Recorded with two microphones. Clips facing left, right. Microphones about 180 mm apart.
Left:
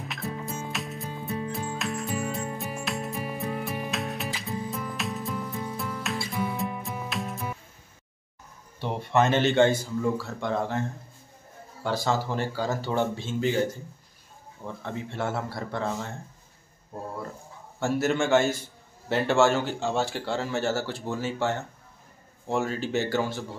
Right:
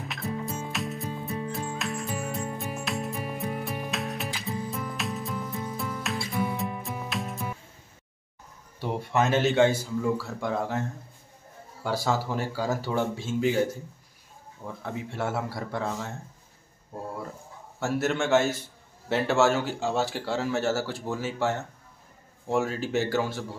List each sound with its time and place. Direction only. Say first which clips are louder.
0.0 s music: right 2 dB; centre (ahead or behind)
8.7 s speech: left 2 dB; 5° right (ahead or behind)
17.7 s speech: left 2 dB; centre (ahead or behind)